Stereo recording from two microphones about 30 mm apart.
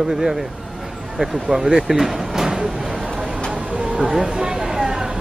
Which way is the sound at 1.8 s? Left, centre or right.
Centre.